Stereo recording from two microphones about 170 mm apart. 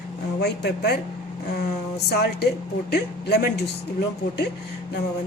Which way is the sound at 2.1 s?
75° left (ahead or behind).